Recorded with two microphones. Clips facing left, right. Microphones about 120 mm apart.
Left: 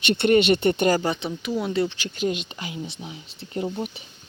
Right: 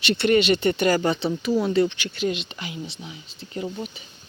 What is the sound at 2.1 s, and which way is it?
Speech, 45° left (ahead or behind).